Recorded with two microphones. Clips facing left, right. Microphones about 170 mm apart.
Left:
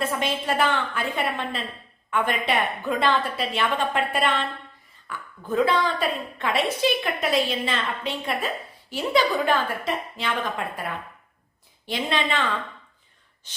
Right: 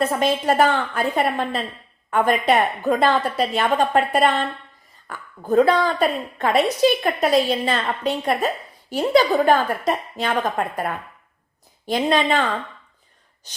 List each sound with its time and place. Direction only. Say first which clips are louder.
0.0 s a woman's voice: right 6 dB; 40° right (ahead or behind)